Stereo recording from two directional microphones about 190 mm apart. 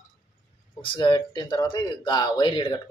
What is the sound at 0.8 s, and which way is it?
Speech, 25° left (ahead or behind).